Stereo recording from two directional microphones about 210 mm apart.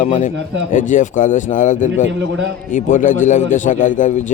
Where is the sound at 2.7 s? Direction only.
35° left (ahead or behind).